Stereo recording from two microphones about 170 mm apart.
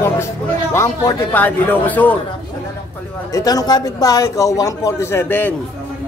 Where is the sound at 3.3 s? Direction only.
20° left (ahead or behind).